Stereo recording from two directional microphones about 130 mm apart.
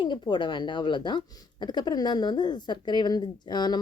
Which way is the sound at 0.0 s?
35° left (ahead or behind).